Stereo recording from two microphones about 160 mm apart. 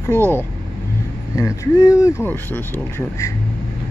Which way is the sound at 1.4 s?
20° left (ahead or behind).